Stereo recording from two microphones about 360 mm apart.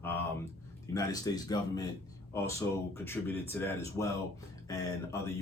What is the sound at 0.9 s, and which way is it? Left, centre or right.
Speech, centre.